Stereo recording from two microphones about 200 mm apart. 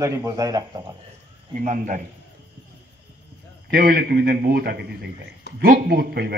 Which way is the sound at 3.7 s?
50° right (ahead or behind).